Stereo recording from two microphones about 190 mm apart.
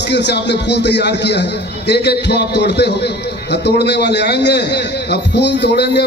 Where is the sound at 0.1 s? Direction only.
65° left (ahead or behind).